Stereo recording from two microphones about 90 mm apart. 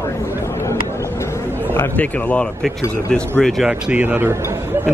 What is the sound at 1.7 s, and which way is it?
Speech, 20° left (ahead or behind).